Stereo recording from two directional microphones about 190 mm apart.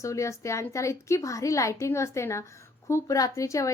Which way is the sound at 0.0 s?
15° left (ahead or behind).